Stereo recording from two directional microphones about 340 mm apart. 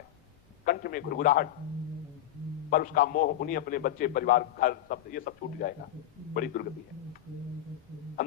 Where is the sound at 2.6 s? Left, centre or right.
Left.